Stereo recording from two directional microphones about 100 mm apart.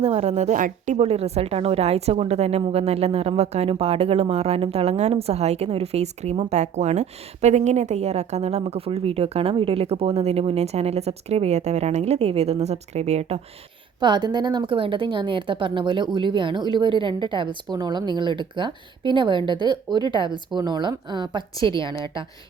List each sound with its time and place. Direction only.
0.0 s a woman's voice: 90° right
7.9 s a woman's voice: 90° right
14.0 s a woman's voice: 45° right (ahead or behind)